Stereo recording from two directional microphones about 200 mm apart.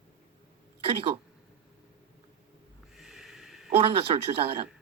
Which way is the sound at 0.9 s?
30° right (ahead or behind).